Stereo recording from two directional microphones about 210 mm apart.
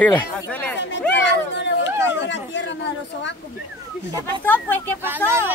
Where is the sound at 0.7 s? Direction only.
60° left (ahead or behind).